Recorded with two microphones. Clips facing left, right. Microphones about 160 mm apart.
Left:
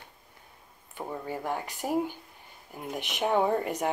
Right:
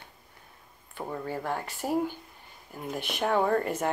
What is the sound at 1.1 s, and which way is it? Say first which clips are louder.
Speech: right 1 dB; 15° left (ahead or behind).